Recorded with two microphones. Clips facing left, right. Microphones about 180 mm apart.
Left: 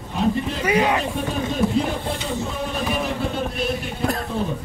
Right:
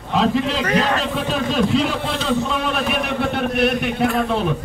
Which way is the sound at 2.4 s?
80° right.